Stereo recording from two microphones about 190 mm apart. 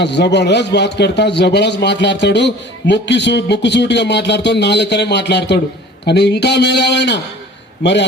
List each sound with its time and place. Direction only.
0.0 s a man's voice: 65° left (ahead or behind)